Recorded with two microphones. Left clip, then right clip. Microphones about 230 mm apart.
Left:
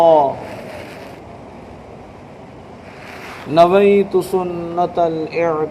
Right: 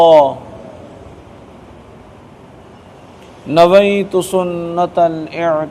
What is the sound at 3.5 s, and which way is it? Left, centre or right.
Speech, right.